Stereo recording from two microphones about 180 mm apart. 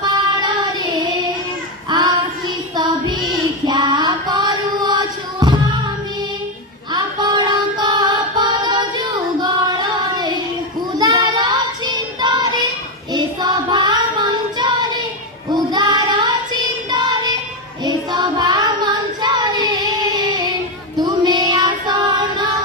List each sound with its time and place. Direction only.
0.0 s child singing: 25° right (ahead or behind)
3.7 s music: 25° right (ahead or behind)
6.9 s music: 25° right (ahead or behind)
10.9 s child singing: 25° right (ahead or behind)